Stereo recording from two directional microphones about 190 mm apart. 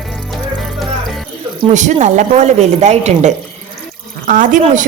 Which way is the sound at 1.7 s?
40° right (ahead or behind).